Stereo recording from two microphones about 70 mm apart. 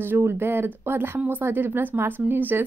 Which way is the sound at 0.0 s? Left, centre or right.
Right.